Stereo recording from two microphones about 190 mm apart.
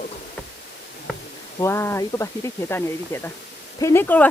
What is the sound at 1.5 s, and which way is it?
Speech, 15° left (ahead or behind).